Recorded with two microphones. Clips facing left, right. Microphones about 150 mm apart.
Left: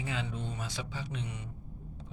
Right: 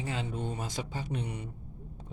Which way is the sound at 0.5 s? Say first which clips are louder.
Right 3 dB; 45° right (ahead or behind).